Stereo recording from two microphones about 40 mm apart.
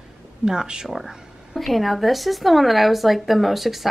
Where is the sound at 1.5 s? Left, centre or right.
Centre.